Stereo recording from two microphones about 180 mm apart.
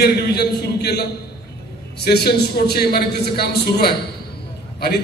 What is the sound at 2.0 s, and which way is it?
A man's voice, 60° left (ahead or behind).